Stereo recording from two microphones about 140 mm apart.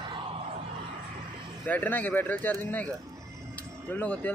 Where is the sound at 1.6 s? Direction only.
15° left (ahead or behind).